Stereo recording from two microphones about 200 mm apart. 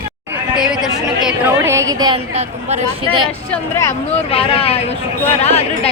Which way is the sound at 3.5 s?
15° left (ahead or behind).